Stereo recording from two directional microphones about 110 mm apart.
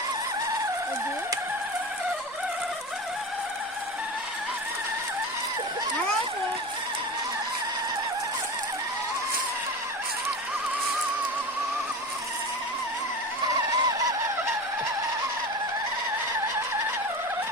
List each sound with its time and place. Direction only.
13.5 s vehicle: 30° right (ahead or behind)